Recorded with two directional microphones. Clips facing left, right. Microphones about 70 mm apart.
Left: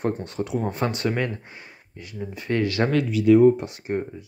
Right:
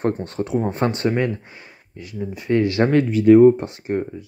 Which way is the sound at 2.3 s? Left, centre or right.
Centre.